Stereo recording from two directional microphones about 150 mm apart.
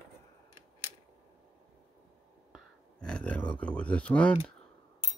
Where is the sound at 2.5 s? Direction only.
5° left (ahead or behind).